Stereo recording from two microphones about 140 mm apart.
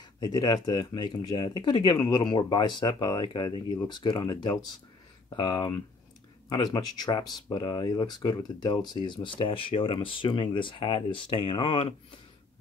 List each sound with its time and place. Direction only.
0.0 s speech: 30° left (ahead or behind)